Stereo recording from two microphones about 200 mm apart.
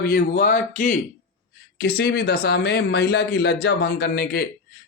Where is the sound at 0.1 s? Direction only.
45° left (ahead or behind).